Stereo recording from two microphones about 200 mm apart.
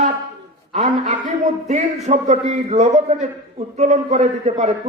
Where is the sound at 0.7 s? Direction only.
35° right (ahead or behind).